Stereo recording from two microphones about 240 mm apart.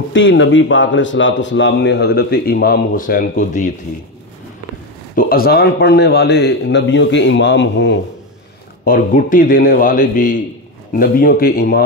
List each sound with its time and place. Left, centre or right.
0.1 s speech: left
5.1 s speech: left
8.8 s a man's voice: left